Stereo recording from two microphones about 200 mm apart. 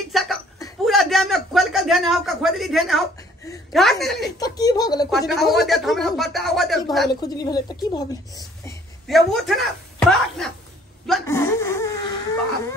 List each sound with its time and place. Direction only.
0.1 s laughter: centre (ahead or behind)
0.8 s a man's voice: centre (ahead or behind)
4.4 s a woman's voice: 20° left (ahead or behind)
5.1 s speech: centre (ahead or behind)
7.2 s a woman's voice: 20° left (ahead or behind)
9.0 s speech: centre (ahead or behind)
11.2 s a sound: 15° left (ahead or behind)